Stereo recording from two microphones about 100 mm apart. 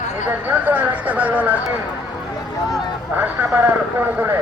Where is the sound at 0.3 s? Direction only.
15° right (ahead or behind).